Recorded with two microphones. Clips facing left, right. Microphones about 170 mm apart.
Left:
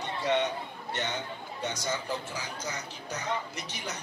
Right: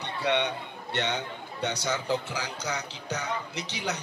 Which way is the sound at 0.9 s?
75° right (ahead or behind).